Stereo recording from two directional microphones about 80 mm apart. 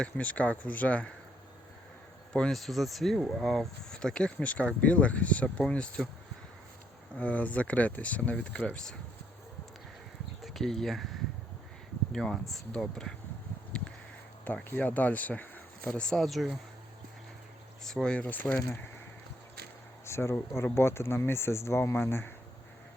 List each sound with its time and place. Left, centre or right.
0.0 s speech: centre
2.3 s speech: centre
7.2 s speech: centre
10.4 s speech: centre
14.4 s speech: left
16.0 s speech: centre
17.8 s speech: centre
18.4 s speech: left
20.1 s speech: left